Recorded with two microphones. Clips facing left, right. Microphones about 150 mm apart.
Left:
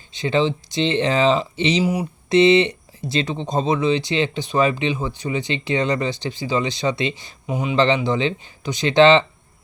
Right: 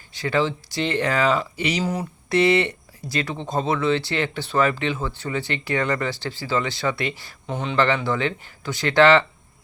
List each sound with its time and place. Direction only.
0.1 s speech: 20° left (ahead or behind)
1.8 s speech: 10° left (ahead or behind)
7.4 s speech: 10° left (ahead or behind)
7.8 s speech: 20° left (ahead or behind)